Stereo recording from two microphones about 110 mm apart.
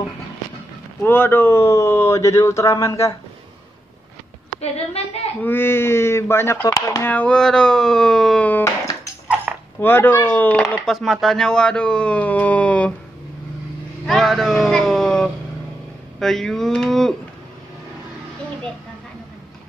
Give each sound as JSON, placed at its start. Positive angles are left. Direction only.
{"t": 1.0, "sound": "speech", "side_deg": 20}
{"t": 5.0, "sound": "a woman's voice", "side_deg": 70}
{"t": 5.4, "sound": "speech", "side_deg": 20}
{"t": 7.1, "sound": "speech", "side_deg": 10}
{"t": 8.5, "sound": "speech", "side_deg": 20}
{"t": 9.8, "sound": "speech", "side_deg": 20}
{"t": 14.0, "sound": "speech", "side_deg": 0}